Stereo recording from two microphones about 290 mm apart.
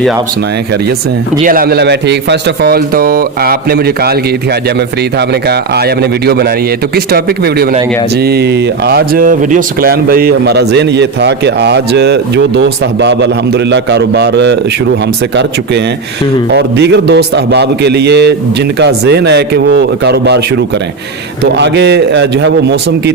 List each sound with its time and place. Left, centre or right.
1.5 s speech: right
16.6 s speech: right
21.5 s speech: right